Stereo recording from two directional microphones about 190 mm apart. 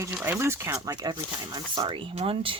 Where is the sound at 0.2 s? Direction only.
15° right (ahead or behind).